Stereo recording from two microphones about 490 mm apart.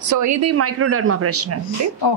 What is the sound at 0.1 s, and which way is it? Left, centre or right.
Speech, right.